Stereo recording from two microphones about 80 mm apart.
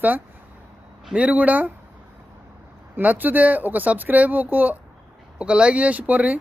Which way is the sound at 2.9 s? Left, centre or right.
Right.